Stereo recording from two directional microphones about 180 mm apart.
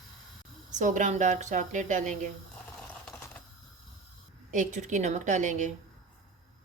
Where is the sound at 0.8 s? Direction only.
45° right (ahead or behind).